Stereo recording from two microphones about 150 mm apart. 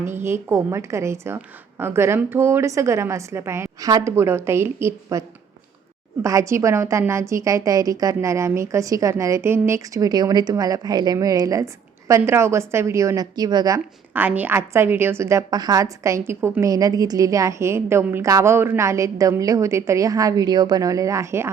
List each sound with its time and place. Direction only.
0.1 s a woman's voice: 15° right (ahead or behind)
6.2 s a woman's voice: 20° right (ahead or behind)
14.1 s a woman's voice: 10° right (ahead or behind)